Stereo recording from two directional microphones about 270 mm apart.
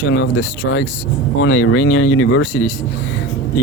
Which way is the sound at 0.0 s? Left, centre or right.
Left.